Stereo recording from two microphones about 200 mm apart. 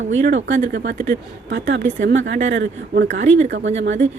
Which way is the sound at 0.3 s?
65° right (ahead or behind).